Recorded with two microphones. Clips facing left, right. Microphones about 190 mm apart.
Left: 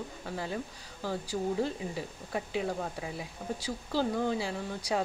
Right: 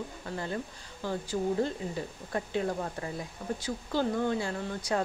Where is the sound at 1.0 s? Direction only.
5° left (ahead or behind).